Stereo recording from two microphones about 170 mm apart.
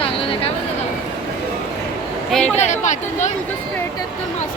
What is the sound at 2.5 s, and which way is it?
Speech, 45° left (ahead or behind).